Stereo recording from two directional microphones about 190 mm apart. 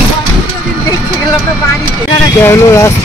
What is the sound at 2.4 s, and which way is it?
Speech, 15° left (ahead or behind).